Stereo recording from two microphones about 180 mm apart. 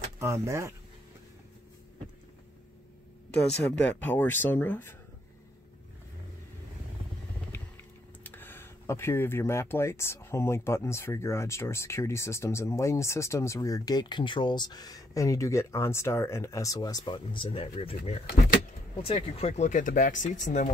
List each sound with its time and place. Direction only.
0.2 s speech: 15° right (ahead or behind)
3.6 s speech: 5° left (ahead or behind)
8.2 s speech: 10° left (ahead or behind); by 20.7 s 40° left (ahead or behind)